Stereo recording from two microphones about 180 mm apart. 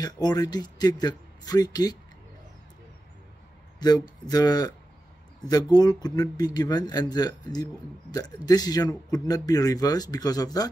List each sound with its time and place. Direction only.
0.0 s speech: 20° left (ahead or behind)
4.3 s speech: 20° left (ahead or behind)